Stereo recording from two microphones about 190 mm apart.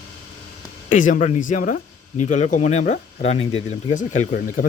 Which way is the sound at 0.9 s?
45° left (ahead or behind).